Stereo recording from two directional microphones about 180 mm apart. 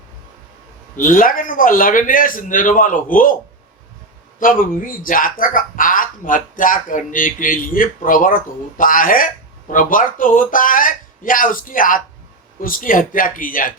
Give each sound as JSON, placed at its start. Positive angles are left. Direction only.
{"t": 0.9, "sound": "speech", "side_deg": 50}
{"t": 4.4, "sound": "speech", "side_deg": 50}